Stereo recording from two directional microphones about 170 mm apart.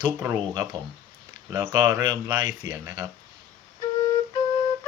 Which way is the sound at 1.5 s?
20° right (ahead or behind).